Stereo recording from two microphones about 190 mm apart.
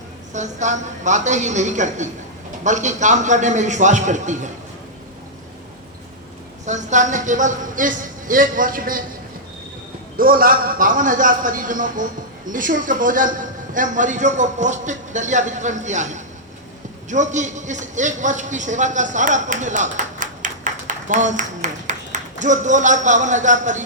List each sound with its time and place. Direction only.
0.3 s a man's voice: 40° right (ahead or behind)
6.7 s a man's voice: 40° right (ahead or behind)
10.2 s a man's voice: 50° right (ahead or behind)